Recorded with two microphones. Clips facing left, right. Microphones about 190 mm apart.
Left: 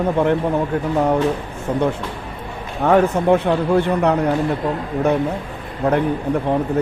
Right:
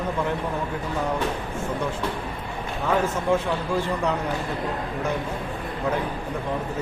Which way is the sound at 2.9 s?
65° left (ahead or behind).